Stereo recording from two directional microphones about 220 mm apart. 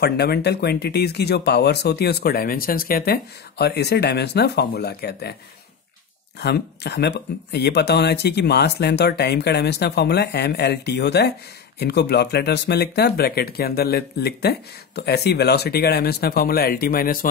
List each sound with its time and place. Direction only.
0.0 s speech: 45° left (ahead or behind)
6.4 s speech: 50° left (ahead or behind)